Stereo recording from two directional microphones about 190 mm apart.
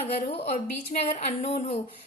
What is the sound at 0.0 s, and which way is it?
A woman's voice, 35° left (ahead or behind).